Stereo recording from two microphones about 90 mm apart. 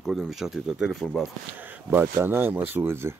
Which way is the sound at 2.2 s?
25° right (ahead or behind).